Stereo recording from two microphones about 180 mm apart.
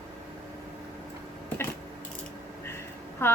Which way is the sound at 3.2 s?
15° left (ahead or behind).